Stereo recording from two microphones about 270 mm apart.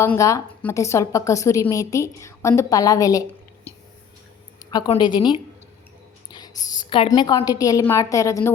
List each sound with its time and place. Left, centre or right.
0.0 s a woman's voice: centre